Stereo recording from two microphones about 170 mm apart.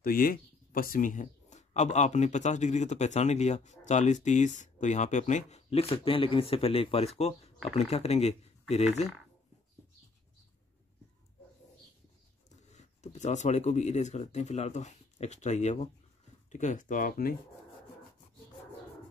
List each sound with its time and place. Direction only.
0.0 s speech: 60° left (ahead or behind); by 8.8 s 40° left (ahead or behind)
12.7 s speech: 45° left (ahead or behind)